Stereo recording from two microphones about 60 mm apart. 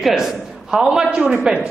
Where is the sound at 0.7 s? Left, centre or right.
Centre.